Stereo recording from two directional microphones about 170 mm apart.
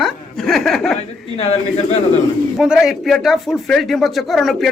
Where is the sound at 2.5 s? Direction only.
5° right (ahead or behind).